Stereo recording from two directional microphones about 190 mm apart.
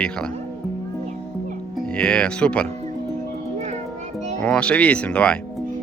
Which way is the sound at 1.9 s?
5° left (ahead or behind).